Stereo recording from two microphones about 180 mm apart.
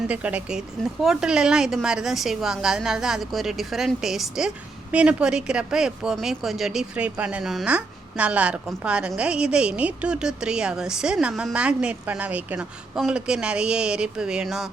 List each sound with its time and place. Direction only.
0.1 s a woman's voice: 5° right (ahead or behind)